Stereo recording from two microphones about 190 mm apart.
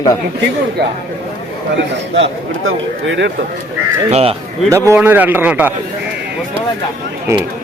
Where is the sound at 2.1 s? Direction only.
80° right.